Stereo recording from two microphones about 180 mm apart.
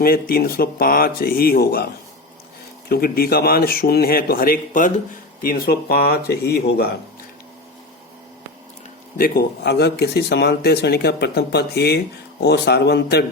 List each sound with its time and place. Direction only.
0.0 s speech: 55° left (ahead or behind)
2.9 s speech: 60° left (ahead or behind)
9.1 s speech: 55° left (ahead or behind)